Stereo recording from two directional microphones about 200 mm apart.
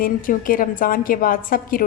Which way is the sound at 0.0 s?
45° left (ahead or behind).